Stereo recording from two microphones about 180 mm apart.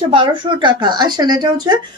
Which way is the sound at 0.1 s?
25° right (ahead or behind).